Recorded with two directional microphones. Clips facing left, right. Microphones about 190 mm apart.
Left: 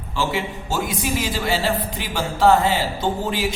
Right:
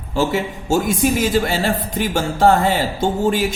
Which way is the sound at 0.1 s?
45° right (ahead or behind).